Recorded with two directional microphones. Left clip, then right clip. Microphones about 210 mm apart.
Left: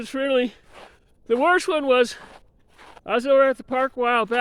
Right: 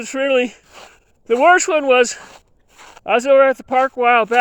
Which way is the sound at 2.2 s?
50° right (ahead or behind).